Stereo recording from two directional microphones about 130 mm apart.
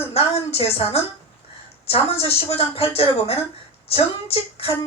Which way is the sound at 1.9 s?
50° left (ahead or behind).